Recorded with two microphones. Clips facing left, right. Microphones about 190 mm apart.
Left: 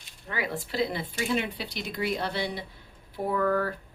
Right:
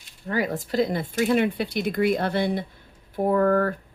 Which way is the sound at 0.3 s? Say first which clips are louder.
Right 7 dB; 40° right (ahead or behind).